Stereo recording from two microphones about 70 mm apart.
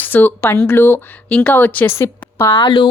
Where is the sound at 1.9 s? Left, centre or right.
Left.